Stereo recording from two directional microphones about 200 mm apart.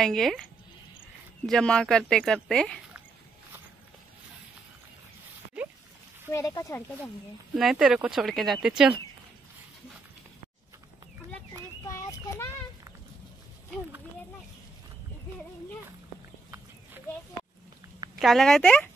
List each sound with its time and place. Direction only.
0.0 s speech: centre (ahead or behind)
1.4 s speech: 5° left (ahead or behind)
6.3 s speech: 15° left (ahead or behind)
7.5 s speech: centre (ahead or behind)
11.8 s a sound: 15° left (ahead or behind)
16.4 s a sound: 15° right (ahead or behind)
18.2 s speech: centre (ahead or behind)